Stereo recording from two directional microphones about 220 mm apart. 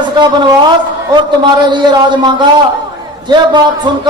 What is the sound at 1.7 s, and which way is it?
A man's voice, 20° right (ahead or behind).